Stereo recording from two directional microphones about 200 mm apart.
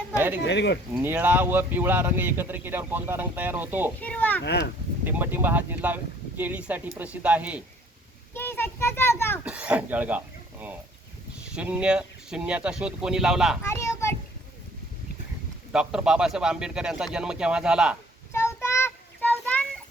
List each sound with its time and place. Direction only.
0.4 s speech: 60° left (ahead or behind)
1.0 s speech: 10° right (ahead or behind)
4.0 s speech: 10° left (ahead or behind)
4.4 s speech: 60° left (ahead or behind)
5.0 s speech: 10° right (ahead or behind)
8.3 s a child's voice: 10° left (ahead or behind)
9.4 s speech: 5° right (ahead or behind)
13.6 s a sound: 15° left (ahead or behind)
15.7 s speech: 5° right (ahead or behind)
18.3 s child singing: 15° left (ahead or behind)